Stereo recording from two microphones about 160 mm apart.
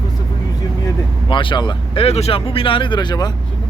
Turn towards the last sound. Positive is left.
turn(degrees=25)  # may be behind; listen again after turning